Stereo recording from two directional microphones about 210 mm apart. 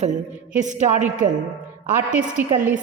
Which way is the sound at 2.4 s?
10° right (ahead or behind).